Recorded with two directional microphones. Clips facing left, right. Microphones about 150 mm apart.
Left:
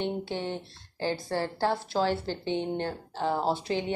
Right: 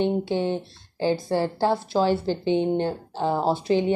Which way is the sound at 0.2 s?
15° right (ahead or behind).